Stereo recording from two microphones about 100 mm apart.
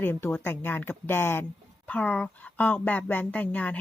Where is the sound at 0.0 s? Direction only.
20° left (ahead or behind).